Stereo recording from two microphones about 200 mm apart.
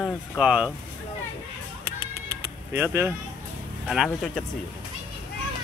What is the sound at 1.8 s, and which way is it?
Music, 55° right (ahead or behind).